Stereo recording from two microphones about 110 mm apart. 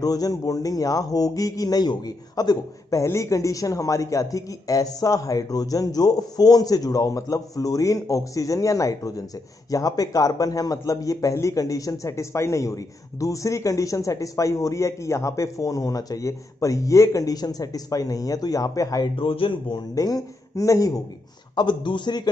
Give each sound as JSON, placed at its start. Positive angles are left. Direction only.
{"t": 0.0, "sound": "a man's voice", "side_deg": 35}
{"t": 19.1, "sound": "speech", "side_deg": 55}
{"t": 20.0, "sound": "a man's voice", "side_deg": 35}
{"t": 21.5, "sound": "speech", "side_deg": 45}